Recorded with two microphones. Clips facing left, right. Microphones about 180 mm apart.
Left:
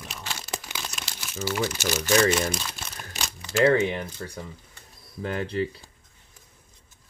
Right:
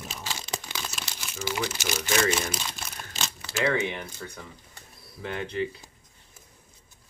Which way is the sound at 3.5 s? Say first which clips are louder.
Left 6 dB; 35° left (ahead or behind).